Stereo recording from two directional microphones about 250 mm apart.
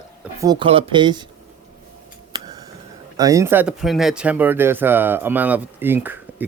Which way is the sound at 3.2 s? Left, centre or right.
Centre.